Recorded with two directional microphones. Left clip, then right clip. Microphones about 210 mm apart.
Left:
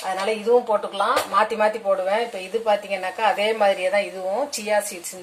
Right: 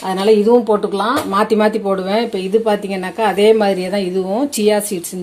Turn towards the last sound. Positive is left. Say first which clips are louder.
# right 7 dB
turn(degrees=-50)  # may be behind; listen again after turning